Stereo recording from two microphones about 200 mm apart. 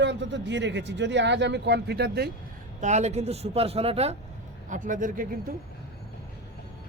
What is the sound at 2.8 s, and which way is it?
A man's voice, 35° right (ahead or behind).